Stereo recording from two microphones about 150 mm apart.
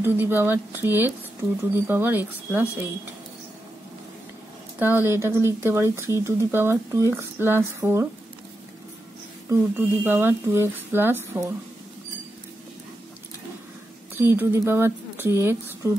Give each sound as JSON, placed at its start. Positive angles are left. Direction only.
{"t": 0.0, "sound": "speech", "side_deg": -15}
{"t": 4.7, "sound": "speech", "side_deg": -15}
{"t": 9.5, "sound": "speech", "side_deg": -15}
{"t": 14.2, "sound": "speech", "side_deg": -15}